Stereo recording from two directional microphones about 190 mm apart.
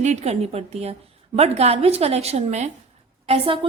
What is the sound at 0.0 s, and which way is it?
A woman's voice, 35° right (ahead or behind).